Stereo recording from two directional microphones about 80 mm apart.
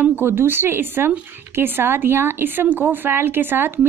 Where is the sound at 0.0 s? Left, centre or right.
Right.